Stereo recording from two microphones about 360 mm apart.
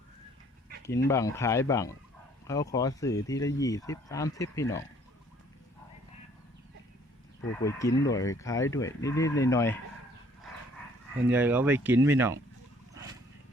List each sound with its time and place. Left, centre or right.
1.0 s speech: centre
7.6 s speech: centre
11.3 s speech: centre